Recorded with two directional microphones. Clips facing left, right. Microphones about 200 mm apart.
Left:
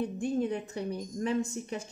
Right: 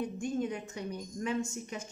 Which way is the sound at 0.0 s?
35° left (ahead or behind).